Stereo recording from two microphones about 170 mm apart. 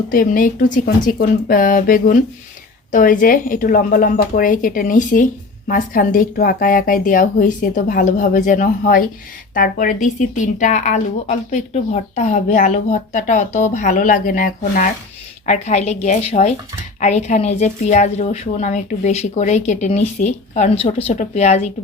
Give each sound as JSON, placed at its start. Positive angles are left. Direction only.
{"t": 0.1, "sound": "speech", "side_deg": 55}
{"t": 15.4, "sound": "a woman's voice", "side_deg": 40}